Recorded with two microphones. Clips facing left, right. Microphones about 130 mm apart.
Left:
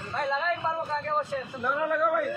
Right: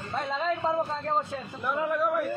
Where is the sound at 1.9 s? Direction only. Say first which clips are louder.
Left 2 dB; 15° right (ahead or behind).